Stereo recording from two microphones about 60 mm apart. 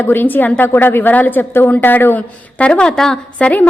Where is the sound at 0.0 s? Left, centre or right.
Left.